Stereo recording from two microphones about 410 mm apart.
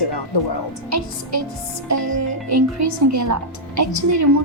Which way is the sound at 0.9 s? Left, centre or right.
Right.